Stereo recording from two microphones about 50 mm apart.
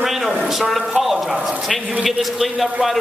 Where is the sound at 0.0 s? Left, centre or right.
Centre.